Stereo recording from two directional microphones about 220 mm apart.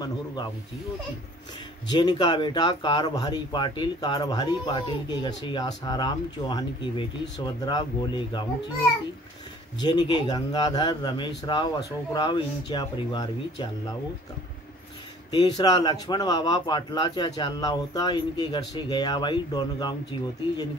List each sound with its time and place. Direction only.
1.9 s speech: 20° left (ahead or behind)
9.8 s speech: 20° left (ahead or behind)
15.3 s speech: 20° left (ahead or behind)